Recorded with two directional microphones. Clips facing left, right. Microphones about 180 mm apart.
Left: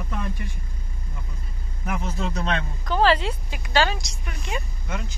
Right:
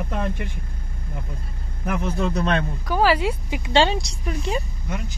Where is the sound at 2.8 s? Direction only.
10° right (ahead or behind).